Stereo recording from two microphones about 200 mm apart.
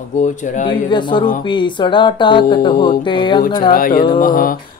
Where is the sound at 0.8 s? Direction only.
25° left (ahead or behind).